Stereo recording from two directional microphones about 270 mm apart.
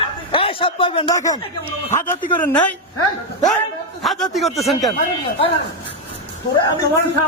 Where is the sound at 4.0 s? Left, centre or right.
Centre.